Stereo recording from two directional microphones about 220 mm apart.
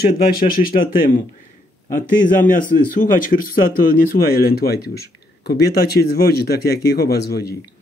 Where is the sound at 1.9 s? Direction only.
35° left (ahead or behind).